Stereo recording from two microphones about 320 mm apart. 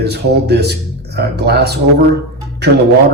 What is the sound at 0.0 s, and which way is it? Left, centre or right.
Speech, right.